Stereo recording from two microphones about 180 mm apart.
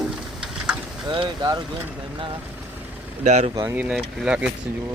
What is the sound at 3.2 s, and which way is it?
Speech, 40° right (ahead or behind).